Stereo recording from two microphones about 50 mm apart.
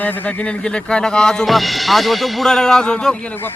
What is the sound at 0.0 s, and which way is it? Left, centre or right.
Speech, left.